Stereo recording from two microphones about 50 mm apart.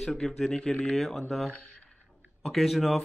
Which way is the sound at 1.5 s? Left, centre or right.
Centre.